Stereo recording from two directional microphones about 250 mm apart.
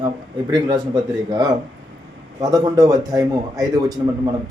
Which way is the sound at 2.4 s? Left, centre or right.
Centre.